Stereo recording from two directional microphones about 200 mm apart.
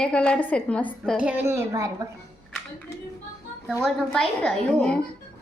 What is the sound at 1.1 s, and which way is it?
Speech, 10° right (ahead or behind).